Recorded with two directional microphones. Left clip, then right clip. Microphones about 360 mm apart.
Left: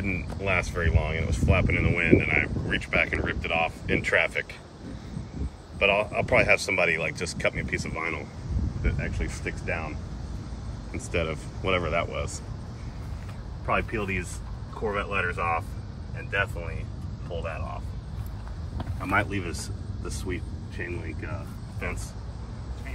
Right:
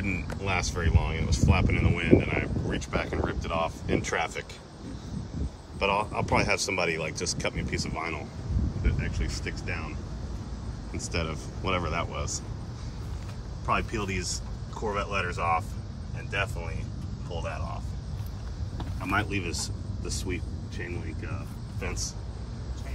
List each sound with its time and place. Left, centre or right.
0.0 s speech: centre
5.8 s speech: centre
11.1 s speech: right
11.6 s speech: centre
13.7 s speech: centre
19.0 s speech: centre
19.6 s vehicle: centre